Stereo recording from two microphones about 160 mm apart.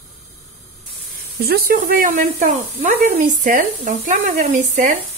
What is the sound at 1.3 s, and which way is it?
Speech, 75° right (ahead or behind).